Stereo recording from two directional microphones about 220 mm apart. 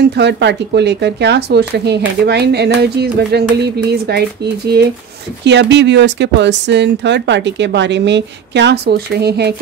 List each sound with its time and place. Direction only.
0.0 s speech: 50° right (ahead or behind)
5.4 s speech: 55° right (ahead or behind)